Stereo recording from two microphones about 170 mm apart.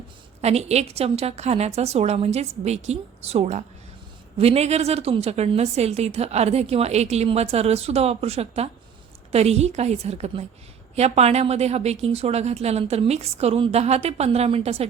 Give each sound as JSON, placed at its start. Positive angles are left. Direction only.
{"t": 0.4, "sound": "a woman's voice", "side_deg": -40}